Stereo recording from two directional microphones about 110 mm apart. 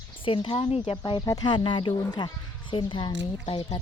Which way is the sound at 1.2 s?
35° left (ahead or behind).